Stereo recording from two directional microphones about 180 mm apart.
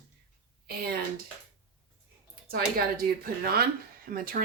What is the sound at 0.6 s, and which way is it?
Speech, 55° right (ahead or behind).